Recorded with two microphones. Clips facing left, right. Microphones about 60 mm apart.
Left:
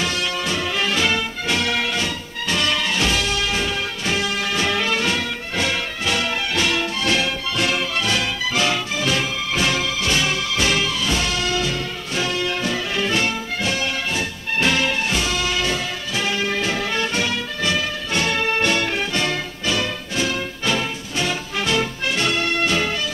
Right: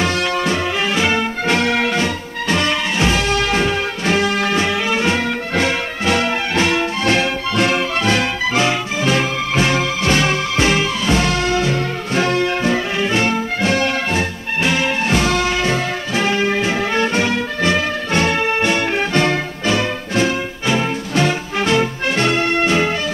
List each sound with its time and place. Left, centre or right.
0.0 s music: right
0.8 s music: right
1.5 s music: right
3.3 s music: right
4.6 s music: centre
5.7 s music: right
13.3 s music: right
14.6 s music: centre
15.0 s music: right
18.3 s music: right
18.9 s music: right